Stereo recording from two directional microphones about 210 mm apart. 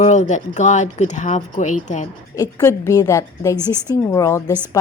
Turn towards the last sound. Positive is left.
turn(degrees=15)  # may be behind; listen again after turning